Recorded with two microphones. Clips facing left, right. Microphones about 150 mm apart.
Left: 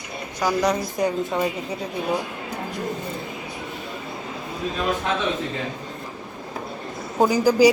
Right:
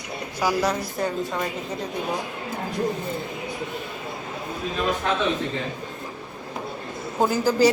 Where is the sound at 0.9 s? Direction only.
20° left (ahead or behind).